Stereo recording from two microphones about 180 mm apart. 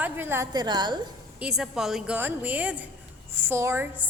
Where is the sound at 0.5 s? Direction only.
25° right (ahead or behind).